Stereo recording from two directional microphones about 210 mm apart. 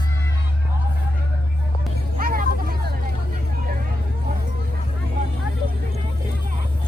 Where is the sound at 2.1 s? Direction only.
45° right (ahead or behind).